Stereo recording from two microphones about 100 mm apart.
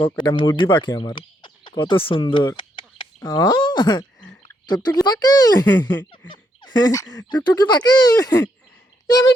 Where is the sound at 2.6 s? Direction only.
55° left (ahead or behind).